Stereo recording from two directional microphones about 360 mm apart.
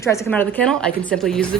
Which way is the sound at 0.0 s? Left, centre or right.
Centre.